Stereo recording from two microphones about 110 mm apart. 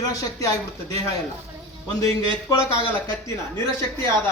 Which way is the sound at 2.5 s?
30° left (ahead or behind).